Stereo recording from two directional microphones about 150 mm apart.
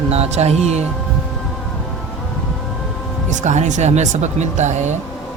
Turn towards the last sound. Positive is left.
turn(degrees=-50)  # may be behind; listen again after turning